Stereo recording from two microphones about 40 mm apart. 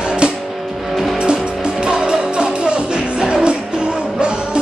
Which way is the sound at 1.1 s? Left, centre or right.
Right.